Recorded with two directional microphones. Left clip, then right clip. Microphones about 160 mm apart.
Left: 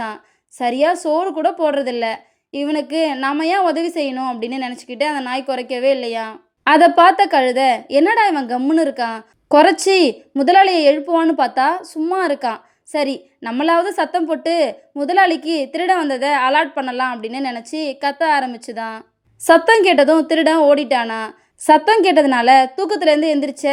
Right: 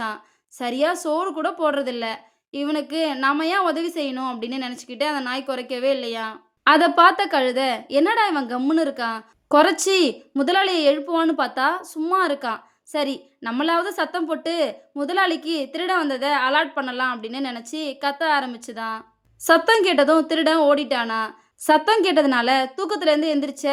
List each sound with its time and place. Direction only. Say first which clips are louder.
0.6 s a woman's voice: left 6 dB; 15° left (ahead or behind)